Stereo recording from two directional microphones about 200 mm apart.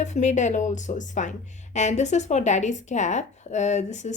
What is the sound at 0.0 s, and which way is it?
A woman's voice, 35° left (ahead or behind).